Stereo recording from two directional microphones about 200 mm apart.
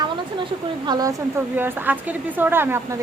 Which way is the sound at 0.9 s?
20° right (ahead or behind).